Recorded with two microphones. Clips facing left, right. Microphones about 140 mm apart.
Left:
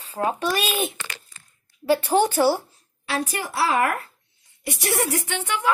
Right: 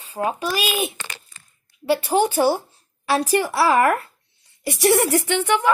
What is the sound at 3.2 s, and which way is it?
A woman's voice, 70° right (ahead or behind).